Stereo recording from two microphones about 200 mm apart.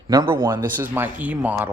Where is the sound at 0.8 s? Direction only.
10° right (ahead or behind).